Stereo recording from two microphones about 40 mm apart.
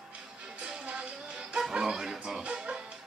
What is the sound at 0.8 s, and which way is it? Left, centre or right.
Music, right.